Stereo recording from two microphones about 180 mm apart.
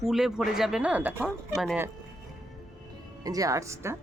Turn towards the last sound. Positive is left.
turn(degrees=-15)  # may be behind; listen again after turning